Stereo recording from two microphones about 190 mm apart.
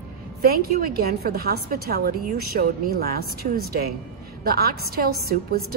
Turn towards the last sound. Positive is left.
turn(degrees=-55)  # may be behind; listen again after turning